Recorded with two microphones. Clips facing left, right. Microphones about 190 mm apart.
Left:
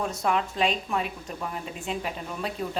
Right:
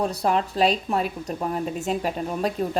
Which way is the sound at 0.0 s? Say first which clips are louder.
Right 4 dB; 35° right (ahead or behind).